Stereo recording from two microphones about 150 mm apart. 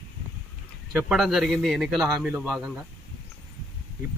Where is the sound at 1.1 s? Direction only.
Centre (ahead or behind).